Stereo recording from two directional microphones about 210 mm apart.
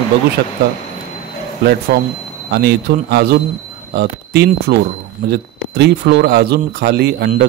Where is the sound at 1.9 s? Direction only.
50° right (ahead or behind).